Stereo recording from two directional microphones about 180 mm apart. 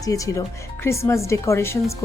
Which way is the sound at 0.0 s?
20° left (ahead or behind).